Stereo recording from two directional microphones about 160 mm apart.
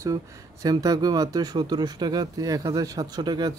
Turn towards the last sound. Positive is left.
turn(degrees=-25)  # may be behind; listen again after turning